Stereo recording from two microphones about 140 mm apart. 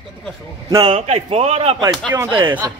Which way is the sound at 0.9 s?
45° right (ahead or behind).